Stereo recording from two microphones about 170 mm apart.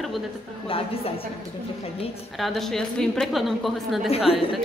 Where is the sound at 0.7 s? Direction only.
35° left (ahead or behind).